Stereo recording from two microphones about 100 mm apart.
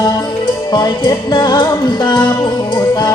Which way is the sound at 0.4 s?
45° left (ahead or behind).